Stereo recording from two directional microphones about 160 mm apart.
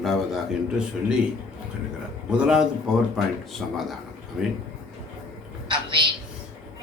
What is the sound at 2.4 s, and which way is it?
Speech, 5° right (ahead or behind).